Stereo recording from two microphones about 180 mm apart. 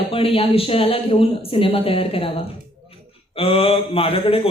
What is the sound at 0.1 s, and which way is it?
Speech, 30° left (ahead or behind).